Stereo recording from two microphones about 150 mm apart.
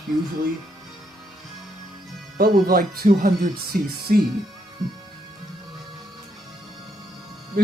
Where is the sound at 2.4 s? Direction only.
85° right.